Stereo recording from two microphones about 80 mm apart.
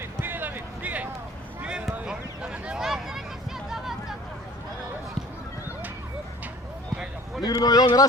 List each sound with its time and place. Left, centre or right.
0.0 s a sound: right; by 3.2 s centre
6.9 s basketball bounce: centre
7.4 s speech: left